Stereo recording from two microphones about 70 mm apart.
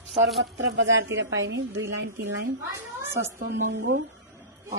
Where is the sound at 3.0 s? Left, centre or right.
Right.